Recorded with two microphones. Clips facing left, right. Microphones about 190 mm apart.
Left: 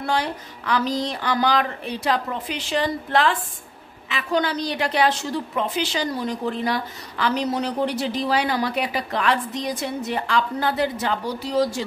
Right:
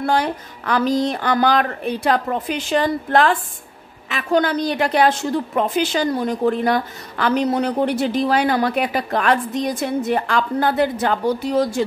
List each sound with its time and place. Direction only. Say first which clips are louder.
0.0 s a woman's voice: right 5 dB; 50° right (ahead or behind)